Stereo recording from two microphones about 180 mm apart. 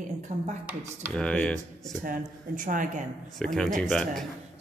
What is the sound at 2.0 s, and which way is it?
Speech, 45° right (ahead or behind).